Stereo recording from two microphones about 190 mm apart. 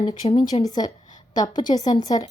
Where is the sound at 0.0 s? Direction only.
25° left (ahead or behind).